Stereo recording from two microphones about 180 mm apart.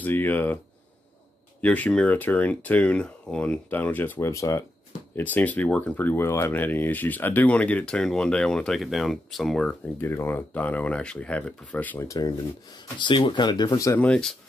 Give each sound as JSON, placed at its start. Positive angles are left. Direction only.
{"t": 0.0, "sound": "speech", "side_deg": 10}
{"t": 1.6, "sound": "speech", "side_deg": 10}
{"t": 12.7, "sound": "speech", "side_deg": 25}
{"t": 14.0, "sound": "speech", "side_deg": 5}